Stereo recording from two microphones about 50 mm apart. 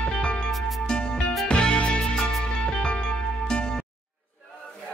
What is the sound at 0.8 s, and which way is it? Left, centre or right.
Music, centre.